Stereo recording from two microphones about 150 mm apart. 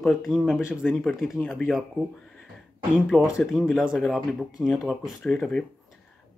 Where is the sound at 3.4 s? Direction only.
Centre (ahead or behind).